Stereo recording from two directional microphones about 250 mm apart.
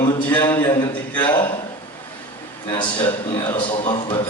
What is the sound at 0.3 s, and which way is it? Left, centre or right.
Speech, centre.